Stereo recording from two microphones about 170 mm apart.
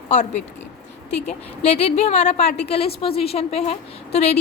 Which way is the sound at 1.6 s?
40° left (ahead or behind).